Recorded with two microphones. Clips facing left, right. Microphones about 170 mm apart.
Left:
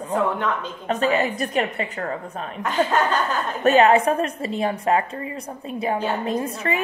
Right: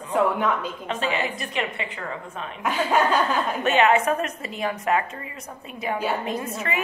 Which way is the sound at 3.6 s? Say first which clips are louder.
Left 5 dB; 35° left (ahead or behind).